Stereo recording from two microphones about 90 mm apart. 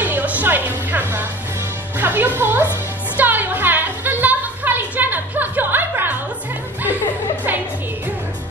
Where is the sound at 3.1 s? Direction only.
20° right (ahead or behind).